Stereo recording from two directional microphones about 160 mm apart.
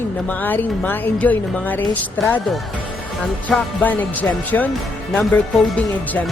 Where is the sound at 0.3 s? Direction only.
10° left (ahead or behind).